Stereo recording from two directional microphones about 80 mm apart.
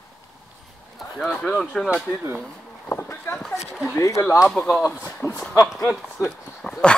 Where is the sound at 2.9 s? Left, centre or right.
Left.